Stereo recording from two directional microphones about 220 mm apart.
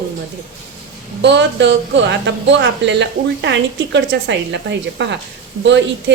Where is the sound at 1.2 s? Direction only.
50° right (ahead or behind).